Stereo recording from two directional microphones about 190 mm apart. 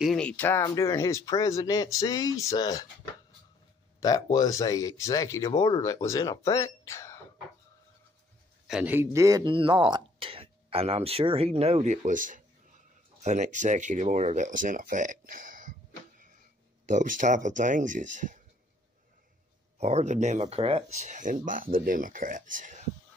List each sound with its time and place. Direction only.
0.0 s speech: 5° left (ahead or behind); by 2.9 s 20° left (ahead or behind)
4.0 s speech: 20° left (ahead or behind)
8.6 s speech: 5° right (ahead or behind); by 15.7 s 45° right (ahead or behind)
16.8 s speech: 40° right (ahead or behind)
19.8 s speech: 35° right (ahead or behind)